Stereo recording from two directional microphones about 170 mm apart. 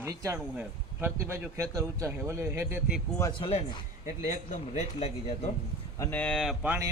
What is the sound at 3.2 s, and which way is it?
Speech, 30° left (ahead or behind).